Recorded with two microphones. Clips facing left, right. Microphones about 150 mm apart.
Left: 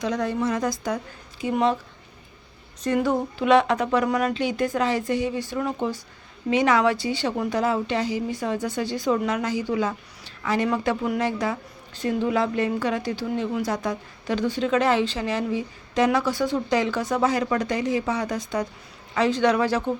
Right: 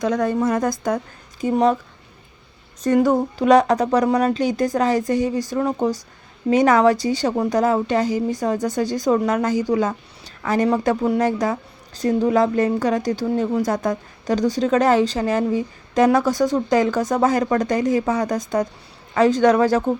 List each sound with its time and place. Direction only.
0.0 s a woman's voice: 50° right (ahead or behind)
2.8 s a woman's voice: 45° right (ahead or behind)